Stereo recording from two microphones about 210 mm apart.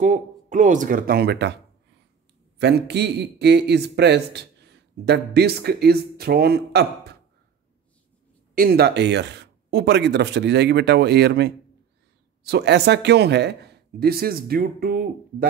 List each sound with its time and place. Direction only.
0.0 s speech: 35° right (ahead or behind)
2.6 s a man's voice: 55° right (ahead or behind)
8.5 s a man's voice: 45° right (ahead or behind)